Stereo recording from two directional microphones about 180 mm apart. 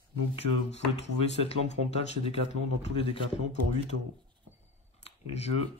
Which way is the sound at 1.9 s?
35° left (ahead or behind).